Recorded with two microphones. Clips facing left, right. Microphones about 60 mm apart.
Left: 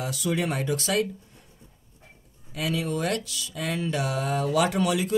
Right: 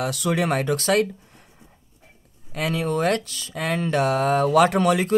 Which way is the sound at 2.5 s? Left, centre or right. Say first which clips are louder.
Right 4 dB; right.